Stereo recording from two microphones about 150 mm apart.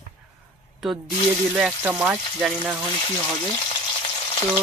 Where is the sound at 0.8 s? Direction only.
Centre (ahead or behind).